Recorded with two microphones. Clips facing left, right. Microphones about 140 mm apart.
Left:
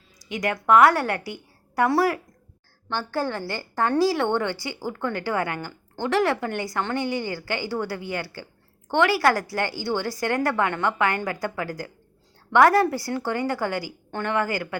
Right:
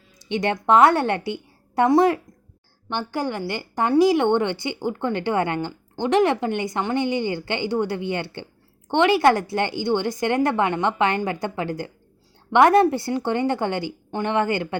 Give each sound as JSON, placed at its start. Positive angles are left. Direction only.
{"t": 0.2, "sound": "a woman's voice", "side_deg": -30}